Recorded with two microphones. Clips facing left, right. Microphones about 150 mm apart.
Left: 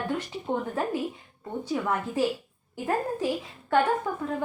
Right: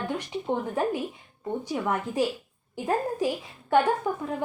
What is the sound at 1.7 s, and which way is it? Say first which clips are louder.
Speech: left 2 dB; 15° right (ahead or behind).